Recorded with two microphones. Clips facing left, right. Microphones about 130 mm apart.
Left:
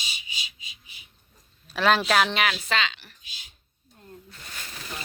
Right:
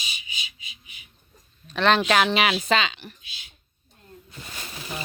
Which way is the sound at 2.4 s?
15° right (ahead or behind).